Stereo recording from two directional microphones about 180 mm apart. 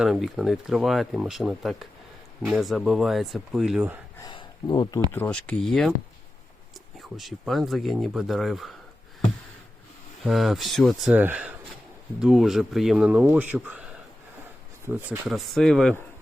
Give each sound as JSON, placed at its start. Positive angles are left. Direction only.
{"t": 0.0, "sound": "speech", "side_deg": 0}
{"t": 4.2, "sound": "speech", "side_deg": 20}
{"t": 5.1, "sound": "speech", "side_deg": 10}
{"t": 7.0, "sound": "speech", "side_deg": 0}
{"t": 10.2, "sound": "speech", "side_deg": 0}
{"t": 15.3, "sound": "speech", "side_deg": 0}